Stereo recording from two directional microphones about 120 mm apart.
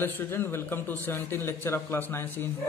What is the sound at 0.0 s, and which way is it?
A man's voice, 20° left (ahead or behind).